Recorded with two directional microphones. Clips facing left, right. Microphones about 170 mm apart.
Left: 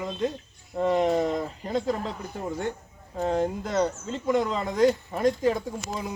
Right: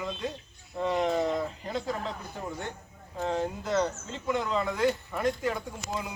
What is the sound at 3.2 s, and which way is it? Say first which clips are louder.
Speech: left 5 dB; 40° left (ahead or behind).